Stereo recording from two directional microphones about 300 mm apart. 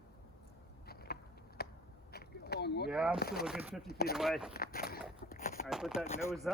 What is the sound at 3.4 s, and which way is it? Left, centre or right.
Speech, centre.